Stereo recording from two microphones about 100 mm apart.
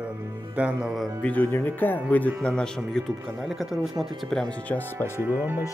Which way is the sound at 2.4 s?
10° left (ahead or behind).